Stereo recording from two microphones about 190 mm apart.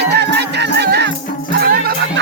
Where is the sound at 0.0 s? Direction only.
60° right (ahead or behind).